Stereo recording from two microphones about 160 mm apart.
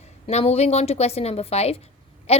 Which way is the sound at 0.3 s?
40° left (ahead or behind).